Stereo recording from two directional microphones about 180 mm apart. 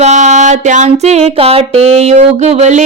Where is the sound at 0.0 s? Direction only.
40° right (ahead or behind).